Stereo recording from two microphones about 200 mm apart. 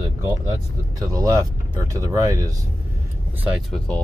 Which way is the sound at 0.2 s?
15° right (ahead or behind).